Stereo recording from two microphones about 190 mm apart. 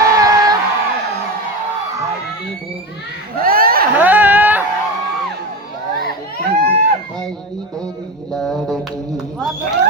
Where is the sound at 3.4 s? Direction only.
50° right (ahead or behind).